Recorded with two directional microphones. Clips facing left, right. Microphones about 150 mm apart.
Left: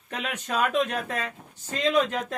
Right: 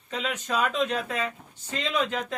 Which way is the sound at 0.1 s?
55° left (ahead or behind).